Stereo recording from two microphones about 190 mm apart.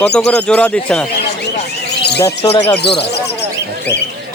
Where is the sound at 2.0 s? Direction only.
60° left (ahead or behind).